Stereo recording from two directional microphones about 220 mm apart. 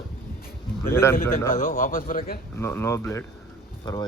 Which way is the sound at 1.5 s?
35° left (ahead or behind).